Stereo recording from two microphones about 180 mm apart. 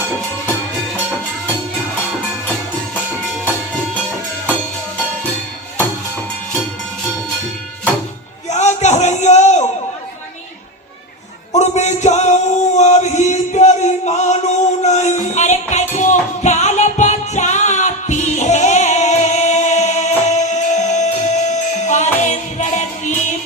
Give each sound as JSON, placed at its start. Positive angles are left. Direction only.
{"t": 8.4, "sound": "a sound", "side_deg": 40}
{"t": 11.5, "sound": "male singing", "side_deg": 40}
{"t": 14.8, "sound": "music", "side_deg": 40}